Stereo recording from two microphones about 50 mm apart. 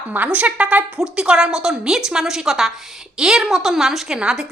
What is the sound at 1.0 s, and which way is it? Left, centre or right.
A woman's voice, centre.